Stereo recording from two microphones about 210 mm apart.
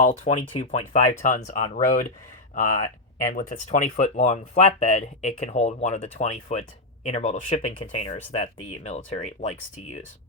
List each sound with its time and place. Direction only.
0.0 s speech: 35° left (ahead or behind)